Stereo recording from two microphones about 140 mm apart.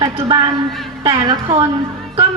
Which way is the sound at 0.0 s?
35° right (ahead or behind).